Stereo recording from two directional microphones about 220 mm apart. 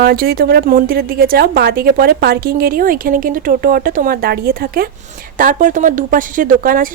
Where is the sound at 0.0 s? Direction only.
45° right (ahead or behind).